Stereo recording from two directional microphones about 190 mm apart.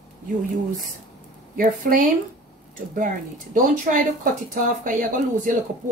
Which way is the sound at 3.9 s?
50° right (ahead or behind).